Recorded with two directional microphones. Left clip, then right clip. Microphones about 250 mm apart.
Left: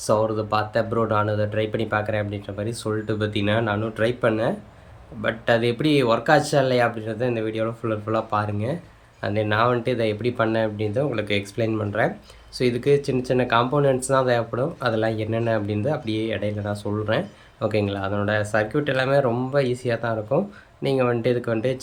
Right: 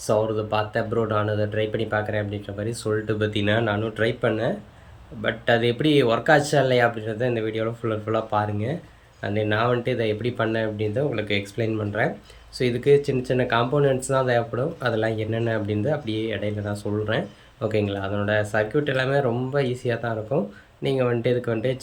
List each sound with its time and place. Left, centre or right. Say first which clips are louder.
0.1 s speech: left 1 dB; centre